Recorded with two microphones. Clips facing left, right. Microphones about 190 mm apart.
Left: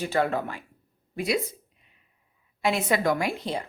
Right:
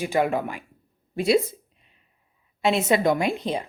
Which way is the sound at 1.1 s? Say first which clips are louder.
Right 7 dB; 30° right (ahead or behind).